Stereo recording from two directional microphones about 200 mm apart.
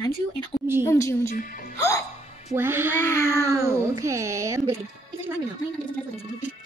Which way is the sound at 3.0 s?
15° left (ahead or behind).